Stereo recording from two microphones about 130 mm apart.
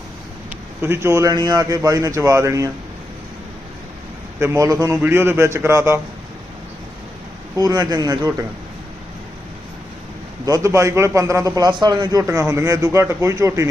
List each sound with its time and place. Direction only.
0.8 s a man's voice: 20° right (ahead or behind)
1.3 s a man's voice: 30° right (ahead or behind)
4.4 s a man's voice: 20° right (ahead or behind)
7.5 s a man's voice: 30° right (ahead or behind)
10.4 s a man's voice: 25° right (ahead or behind)